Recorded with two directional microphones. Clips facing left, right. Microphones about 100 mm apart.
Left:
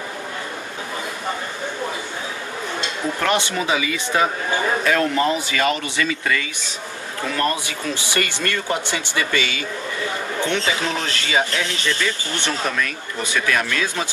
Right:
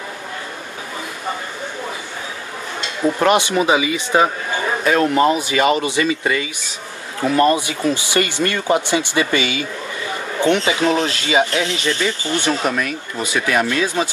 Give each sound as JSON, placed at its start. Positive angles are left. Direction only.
{"t": 3.2, "sound": "speech", "side_deg": -20}